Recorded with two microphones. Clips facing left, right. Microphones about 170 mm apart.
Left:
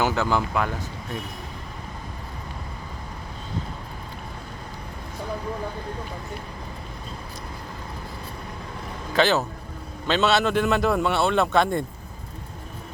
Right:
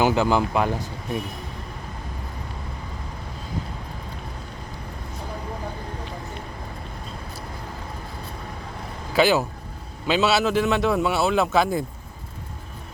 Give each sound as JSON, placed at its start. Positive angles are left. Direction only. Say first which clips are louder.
{"t": 0.0, "sound": "speech", "louder": "right 3 dB", "side_deg": -15}
{"t": 9.1, "sound": "a man's voice", "louder": "right 2 dB", "side_deg": -10}